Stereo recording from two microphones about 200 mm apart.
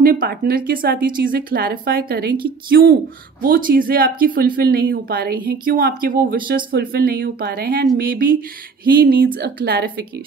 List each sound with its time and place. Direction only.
0.0 s speech: 50° right (ahead or behind)